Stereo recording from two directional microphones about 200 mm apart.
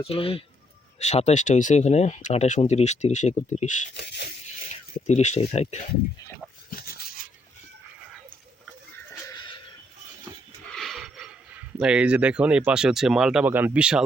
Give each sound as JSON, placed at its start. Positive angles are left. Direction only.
{"t": 0.0, "sound": "speech", "side_deg": 30}
{"t": 3.9, "sound": "a sound", "side_deg": 55}
{"t": 4.6, "sound": "speech", "side_deg": 35}
{"t": 6.7, "sound": "dog", "side_deg": 50}
{"t": 9.3, "sound": "a sound", "side_deg": 25}
{"t": 10.8, "sound": "speech", "side_deg": 0}